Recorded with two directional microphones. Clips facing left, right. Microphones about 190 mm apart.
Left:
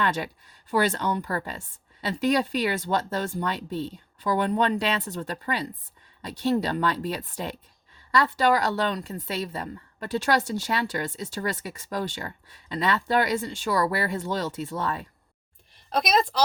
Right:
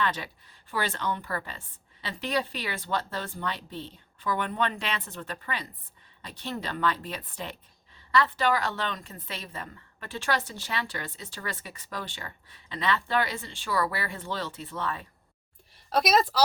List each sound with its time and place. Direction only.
0.0 s a woman's voice: 45° left (ahead or behind)
15.9 s a woman's voice: 5° right (ahead or behind)